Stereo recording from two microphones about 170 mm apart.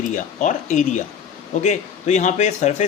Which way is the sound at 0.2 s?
45° left (ahead or behind).